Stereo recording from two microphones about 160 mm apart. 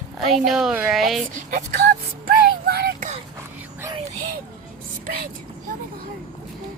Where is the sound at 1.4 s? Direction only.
55° right (ahead or behind).